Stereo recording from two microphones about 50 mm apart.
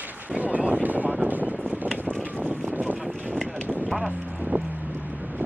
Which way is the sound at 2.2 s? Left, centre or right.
Right.